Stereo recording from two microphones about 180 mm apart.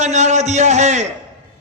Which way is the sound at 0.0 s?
40° right (ahead or behind).